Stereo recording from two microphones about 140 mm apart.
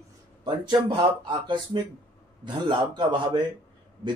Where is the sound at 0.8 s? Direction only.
35° right (ahead or behind).